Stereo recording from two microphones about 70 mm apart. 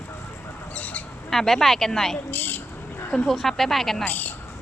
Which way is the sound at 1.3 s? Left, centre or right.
Centre.